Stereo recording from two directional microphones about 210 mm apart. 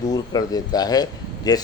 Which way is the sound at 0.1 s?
20° left (ahead or behind).